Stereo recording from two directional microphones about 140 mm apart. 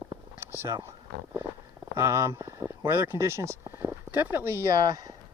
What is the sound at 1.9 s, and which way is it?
Speech, 20° right (ahead or behind).